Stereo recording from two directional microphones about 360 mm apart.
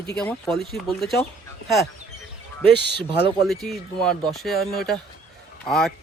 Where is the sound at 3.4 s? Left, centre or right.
Centre.